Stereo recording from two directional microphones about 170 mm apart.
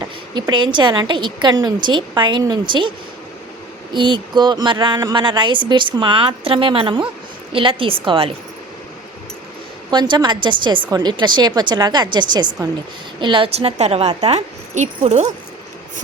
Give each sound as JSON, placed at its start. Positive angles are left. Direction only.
{"t": 0.3, "sound": "a woman's voice", "side_deg": -25}
{"t": 3.9, "sound": "a woman's voice", "side_deg": -30}
{"t": 9.9, "sound": "a woman's voice", "side_deg": -25}